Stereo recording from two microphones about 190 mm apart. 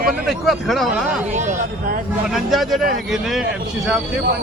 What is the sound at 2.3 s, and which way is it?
Speech, centre (ahead or behind).